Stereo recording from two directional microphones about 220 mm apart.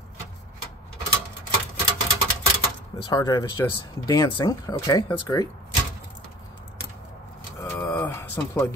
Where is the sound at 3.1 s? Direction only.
20° left (ahead or behind).